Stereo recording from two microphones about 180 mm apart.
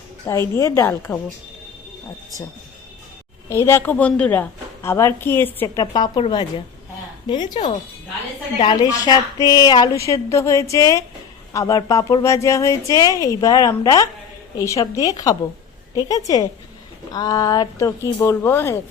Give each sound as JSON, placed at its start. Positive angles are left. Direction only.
{"t": 0.3, "sound": "a woman's voice", "side_deg": 15}
{"t": 3.5, "sound": "a woman's voice", "side_deg": 15}